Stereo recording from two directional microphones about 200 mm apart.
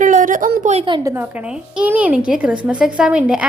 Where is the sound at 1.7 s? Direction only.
5° right (ahead or behind).